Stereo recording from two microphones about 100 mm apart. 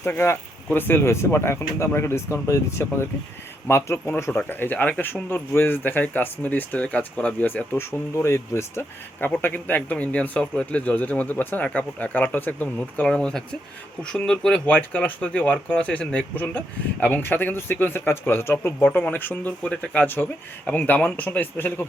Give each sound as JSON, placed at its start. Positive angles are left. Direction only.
{"t": 0.0, "sound": "speech", "side_deg": 20}